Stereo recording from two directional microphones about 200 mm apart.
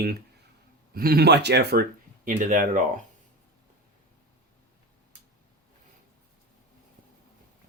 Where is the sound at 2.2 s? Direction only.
45° right (ahead or behind).